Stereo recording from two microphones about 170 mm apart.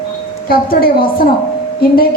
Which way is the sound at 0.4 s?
60° left (ahead or behind).